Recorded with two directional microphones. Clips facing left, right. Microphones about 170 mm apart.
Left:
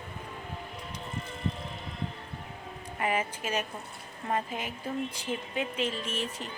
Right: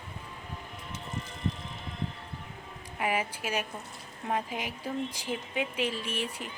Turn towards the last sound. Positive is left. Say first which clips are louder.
# even
turn(degrees=-10)  # may be behind; listen again after turning